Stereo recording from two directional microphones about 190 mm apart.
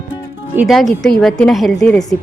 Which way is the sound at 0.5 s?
5° right (ahead or behind).